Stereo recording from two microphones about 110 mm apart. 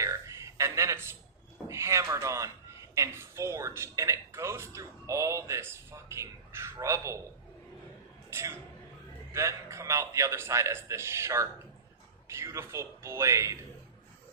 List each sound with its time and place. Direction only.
0.0 s a sound: 25° right (ahead or behind)
1.6 s speech: 25° right (ahead or behind)
8.3 s speech: 25° right (ahead or behind)